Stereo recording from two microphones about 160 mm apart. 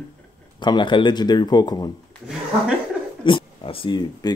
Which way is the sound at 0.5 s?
30° left (ahead or behind).